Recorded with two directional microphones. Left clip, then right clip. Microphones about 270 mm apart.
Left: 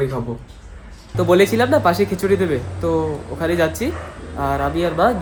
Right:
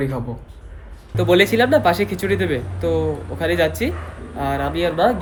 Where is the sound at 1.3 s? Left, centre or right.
Centre.